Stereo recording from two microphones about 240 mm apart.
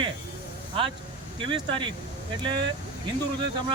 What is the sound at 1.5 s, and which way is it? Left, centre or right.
Speech, centre.